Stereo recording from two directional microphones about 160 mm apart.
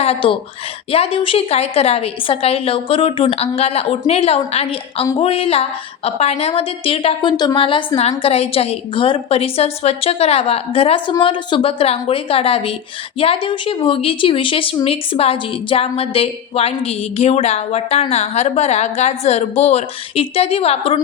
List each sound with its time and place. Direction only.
0.0 s speech: 35° left (ahead or behind)